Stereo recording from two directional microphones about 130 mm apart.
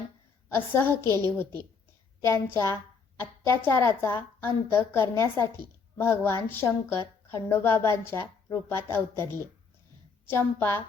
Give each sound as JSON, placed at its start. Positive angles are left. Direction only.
{"t": 0.4, "sound": "a woman's voice", "side_deg": 15}
{"t": 2.2, "sound": "a woman's voice", "side_deg": 20}